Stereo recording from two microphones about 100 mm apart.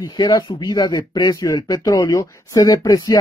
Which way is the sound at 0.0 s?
40° left (ahead or behind).